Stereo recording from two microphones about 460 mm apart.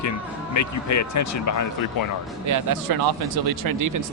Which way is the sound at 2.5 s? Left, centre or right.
Right.